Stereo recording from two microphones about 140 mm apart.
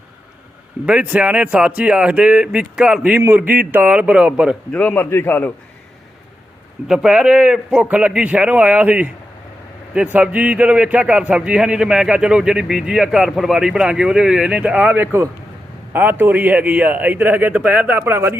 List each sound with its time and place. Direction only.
0.9 s a man's voice: 10° right (ahead or behind)
4.7 s a man's voice: 10° left (ahead or behind)
6.8 s a man's voice: 5° right (ahead or behind)